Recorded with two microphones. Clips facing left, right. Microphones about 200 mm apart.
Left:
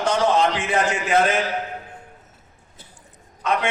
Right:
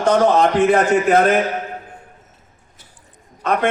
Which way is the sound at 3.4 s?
55° right (ahead or behind).